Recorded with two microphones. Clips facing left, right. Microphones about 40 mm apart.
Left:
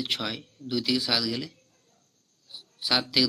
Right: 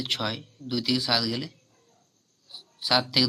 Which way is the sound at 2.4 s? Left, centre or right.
Centre.